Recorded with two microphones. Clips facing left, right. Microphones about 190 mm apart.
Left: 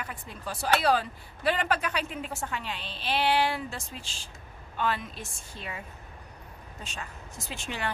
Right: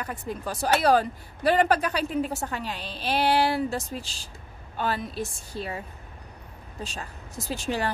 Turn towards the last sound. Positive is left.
turn(degrees=-35)  # may be behind; listen again after turning